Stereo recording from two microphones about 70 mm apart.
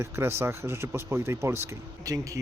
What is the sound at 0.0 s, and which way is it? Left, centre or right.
Speech, right.